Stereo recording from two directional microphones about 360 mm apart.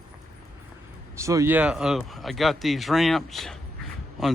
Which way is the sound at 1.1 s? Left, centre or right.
Centre.